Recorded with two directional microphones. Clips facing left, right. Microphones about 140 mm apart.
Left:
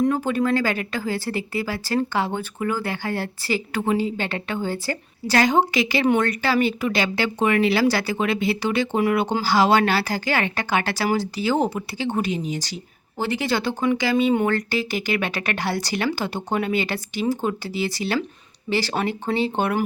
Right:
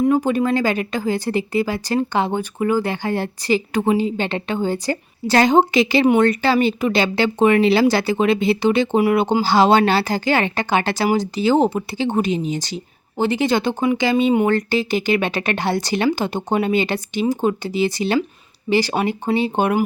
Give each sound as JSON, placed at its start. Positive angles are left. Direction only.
{"t": 0.1, "sound": "a woman's voice", "side_deg": -20}